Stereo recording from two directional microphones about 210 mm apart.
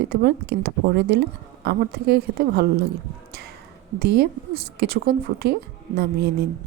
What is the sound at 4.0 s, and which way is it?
Speech, 50° right (ahead or behind).